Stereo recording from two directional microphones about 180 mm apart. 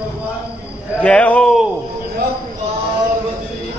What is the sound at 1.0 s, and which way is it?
Speech, 5° left (ahead or behind).